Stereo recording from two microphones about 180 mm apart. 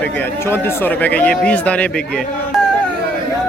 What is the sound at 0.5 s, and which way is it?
Speech, 10° left (ahead or behind).